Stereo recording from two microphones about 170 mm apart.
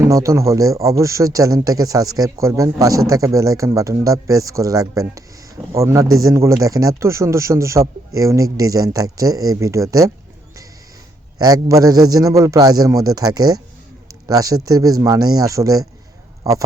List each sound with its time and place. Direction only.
0.0 s speech: 20° right (ahead or behind)
11.3 s speech: 20° right (ahead or behind)